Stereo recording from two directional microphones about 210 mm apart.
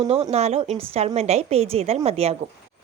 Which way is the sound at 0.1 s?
30° right (ahead or behind).